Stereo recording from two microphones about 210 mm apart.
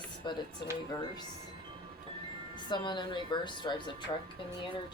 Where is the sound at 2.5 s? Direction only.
20° left (ahead or behind).